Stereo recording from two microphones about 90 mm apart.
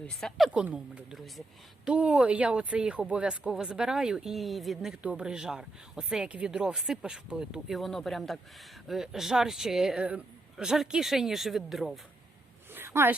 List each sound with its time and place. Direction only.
0.0 s speech: 5° left (ahead or behind)
0.6 s speech: 10° right (ahead or behind)
1.2 s speech: centre (ahead or behind)
1.9 s speech: 10° right (ahead or behind)
12.7 s a sound: 25° right (ahead or behind)